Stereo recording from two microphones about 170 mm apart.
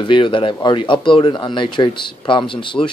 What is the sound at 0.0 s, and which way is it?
Speech, 30° left (ahead or behind).